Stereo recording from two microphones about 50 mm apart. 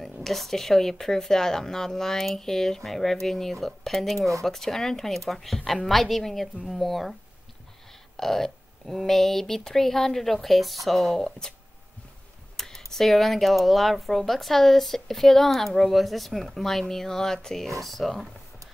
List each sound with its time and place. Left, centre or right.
0.0 s speech: centre
8.2 s speech: centre
12.5 s computer keyboard: centre
12.9 s speech: centre